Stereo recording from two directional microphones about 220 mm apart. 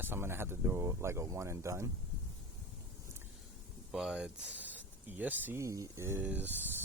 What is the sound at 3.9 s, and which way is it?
Speech, centre (ahead or behind).